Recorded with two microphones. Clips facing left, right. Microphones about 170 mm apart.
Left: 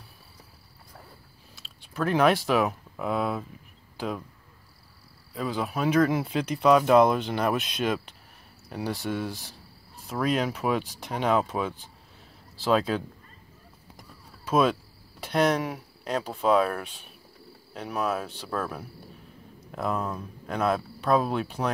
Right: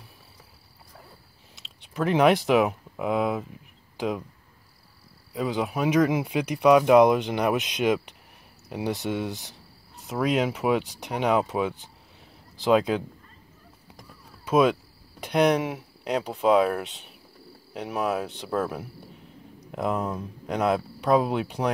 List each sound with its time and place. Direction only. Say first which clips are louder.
1.6 s speech: right 2 dB; 20° right (ahead or behind)
3.9 s a sound: right 4 dB; 15° right (ahead or behind)
5.3 s speech: right 3 dB; 20° right (ahead or behind)
14.4 s speech: right 2 dB; 10° right (ahead or behind)